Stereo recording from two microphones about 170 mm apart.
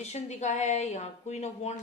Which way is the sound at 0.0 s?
40° left (ahead or behind).